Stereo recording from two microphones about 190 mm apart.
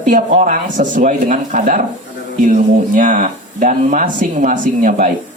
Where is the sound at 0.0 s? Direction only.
40° right (ahead or behind).